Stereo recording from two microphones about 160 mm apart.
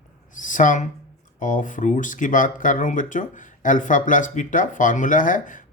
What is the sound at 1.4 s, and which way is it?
Speech, 55° left (ahead or behind).